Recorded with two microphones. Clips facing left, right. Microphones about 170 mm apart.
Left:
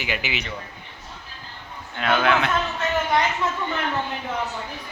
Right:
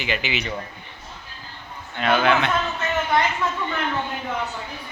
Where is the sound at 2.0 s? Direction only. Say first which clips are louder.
Right 1 dB; centre (ahead or behind).